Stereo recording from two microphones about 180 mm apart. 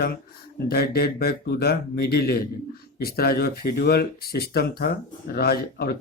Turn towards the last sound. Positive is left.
turn(degrees=60)  # may be behind; listen again after turning